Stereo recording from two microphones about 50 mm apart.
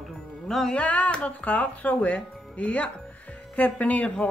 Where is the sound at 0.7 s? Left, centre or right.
Left.